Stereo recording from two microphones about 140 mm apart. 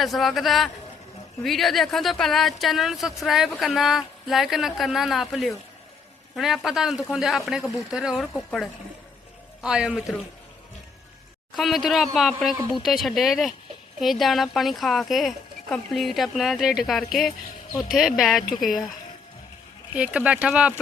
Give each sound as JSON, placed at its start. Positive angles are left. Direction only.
{"t": 0.0, "sound": "speech", "side_deg": 0}
{"t": 9.6, "sound": "speech", "side_deg": -5}
{"t": 11.5, "sound": "speech", "side_deg": 0}
{"t": 20.0, "sound": "speech", "side_deg": -10}